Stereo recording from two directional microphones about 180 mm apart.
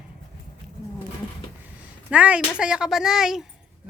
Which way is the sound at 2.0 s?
5° right (ahead or behind).